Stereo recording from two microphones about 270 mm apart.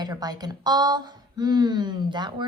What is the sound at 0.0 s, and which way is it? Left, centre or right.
Speech, centre.